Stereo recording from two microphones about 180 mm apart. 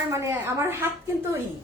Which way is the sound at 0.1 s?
15° right (ahead or behind).